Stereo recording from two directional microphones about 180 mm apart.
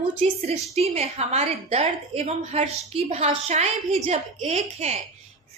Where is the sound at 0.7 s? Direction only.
35° right (ahead or behind).